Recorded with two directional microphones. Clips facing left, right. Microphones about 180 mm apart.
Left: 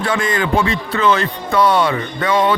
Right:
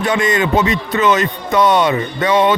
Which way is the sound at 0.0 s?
20° right (ahead or behind).